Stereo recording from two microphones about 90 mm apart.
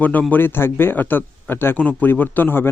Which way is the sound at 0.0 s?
20° left (ahead or behind).